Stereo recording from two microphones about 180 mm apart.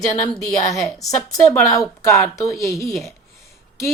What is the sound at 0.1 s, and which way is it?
A woman's voice, 20° left (ahead or behind).